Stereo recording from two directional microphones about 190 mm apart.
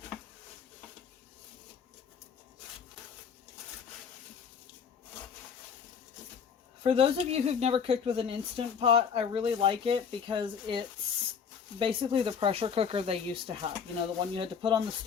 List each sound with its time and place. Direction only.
6.8 s speech: 30° right (ahead or behind)